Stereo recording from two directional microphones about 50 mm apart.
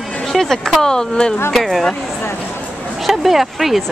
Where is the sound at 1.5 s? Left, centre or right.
Centre.